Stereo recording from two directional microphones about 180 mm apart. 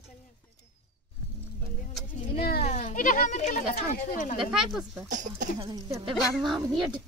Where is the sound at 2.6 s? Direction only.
40° left (ahead or behind).